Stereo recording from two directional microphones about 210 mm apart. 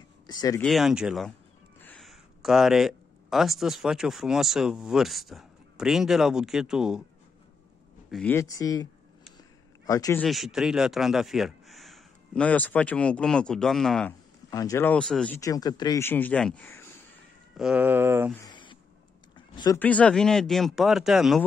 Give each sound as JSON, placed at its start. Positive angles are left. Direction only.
{"t": 0.3, "sound": "speech", "side_deg": 15}
{"t": 0.6, "sound": "speech", "side_deg": 0}
{"t": 8.1, "sound": "speech", "side_deg": 5}
{"t": 9.8, "sound": "speech", "side_deg": 15}
{"t": 10.2, "sound": "speech", "side_deg": 0}
{"t": 14.5, "sound": "speech", "side_deg": 15}
{"t": 17.6, "sound": "a sound", "side_deg": -5}
{"t": 18.4, "sound": "a sound", "side_deg": 20}
{"t": 19.8, "sound": "speech", "side_deg": 5}